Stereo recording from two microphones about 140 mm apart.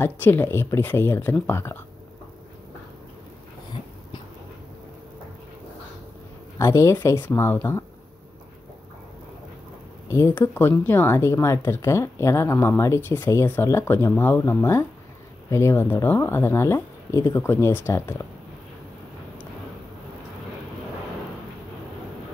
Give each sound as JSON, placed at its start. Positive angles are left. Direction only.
{"t": 0.0, "sound": "speech", "side_deg": 15}
{"t": 6.6, "sound": "speech", "side_deg": 20}
{"t": 10.0, "sound": "speech", "side_deg": 20}